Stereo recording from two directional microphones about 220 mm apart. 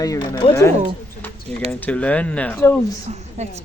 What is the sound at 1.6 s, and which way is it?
Speech, 5° left (ahead or behind).